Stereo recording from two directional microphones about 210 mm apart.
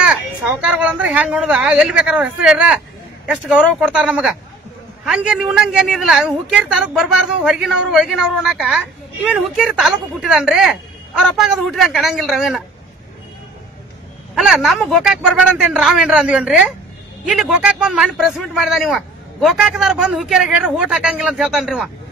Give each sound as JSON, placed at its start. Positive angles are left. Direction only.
{"t": 0.0, "sound": "a man's voice", "side_deg": -5}
{"t": 14.3, "sound": "a man's voice", "side_deg": 0}